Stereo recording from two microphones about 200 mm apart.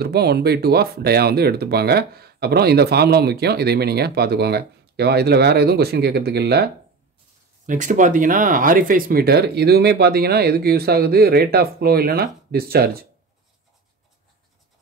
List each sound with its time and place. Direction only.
0.0 s speech: 55° right (ahead or behind)
7.6 s speech: 40° right (ahead or behind)